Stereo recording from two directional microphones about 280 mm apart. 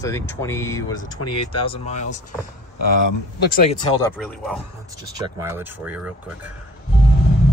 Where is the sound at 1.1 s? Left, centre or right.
Left.